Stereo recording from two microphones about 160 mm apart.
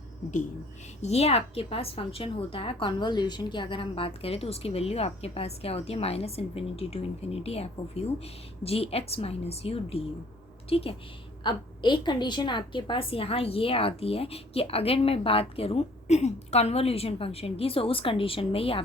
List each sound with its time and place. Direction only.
1.0 s a woman's voice: 40° left (ahead or behind)